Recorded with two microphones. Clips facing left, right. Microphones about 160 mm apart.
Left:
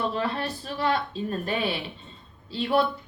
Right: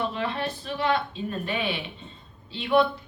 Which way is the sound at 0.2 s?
40° left (ahead or behind).